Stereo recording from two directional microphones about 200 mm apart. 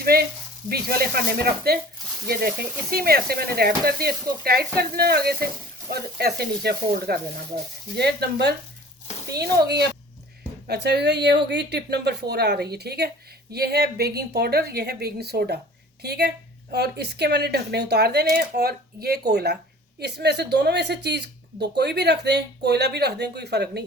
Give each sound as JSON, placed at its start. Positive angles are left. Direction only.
{"t": 0.0, "sound": "a woman's voice", "side_deg": -50}